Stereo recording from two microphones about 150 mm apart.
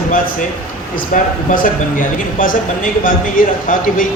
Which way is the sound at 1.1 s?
65° left (ahead or behind).